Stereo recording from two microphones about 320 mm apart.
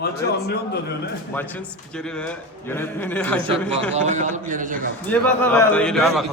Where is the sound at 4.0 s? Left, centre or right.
Right.